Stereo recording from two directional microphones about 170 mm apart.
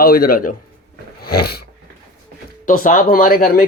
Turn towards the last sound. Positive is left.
turn(degrees=60)  # may be behind; listen again after turning